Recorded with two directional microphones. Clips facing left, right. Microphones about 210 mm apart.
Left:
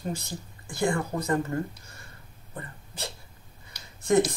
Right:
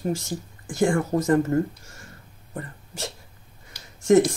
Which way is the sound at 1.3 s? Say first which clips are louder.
Right 7 dB; 45° right (ahead or behind).